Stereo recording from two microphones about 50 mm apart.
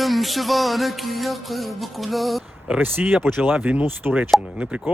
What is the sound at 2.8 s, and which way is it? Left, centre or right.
Speech, right.